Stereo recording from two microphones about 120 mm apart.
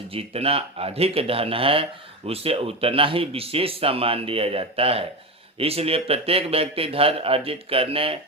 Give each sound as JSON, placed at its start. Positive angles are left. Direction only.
{"t": 0.1, "sound": "speech", "side_deg": -55}